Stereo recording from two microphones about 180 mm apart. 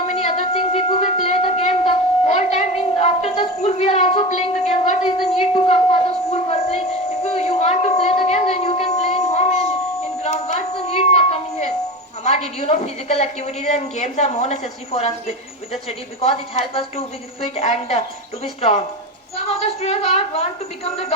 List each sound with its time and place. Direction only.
0.1 s music: 40° left (ahead or behind)
7.3 s a sound: 35° left (ahead or behind)
10.2 s music: 40° left (ahead or behind)
12.2 s a woman's voice: 35° left (ahead or behind)
19.5 s a woman's voice: 35° left (ahead or behind)